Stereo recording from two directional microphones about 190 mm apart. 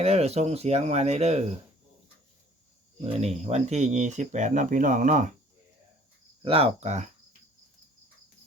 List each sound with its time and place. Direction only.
0.0 s speech: 35° right (ahead or behind)
3.0 s speech: 35° right (ahead or behind)
6.4 s speech: 30° right (ahead or behind)